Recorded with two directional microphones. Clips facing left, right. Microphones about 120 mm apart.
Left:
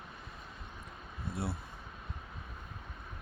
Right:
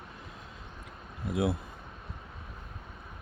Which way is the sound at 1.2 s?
90° right.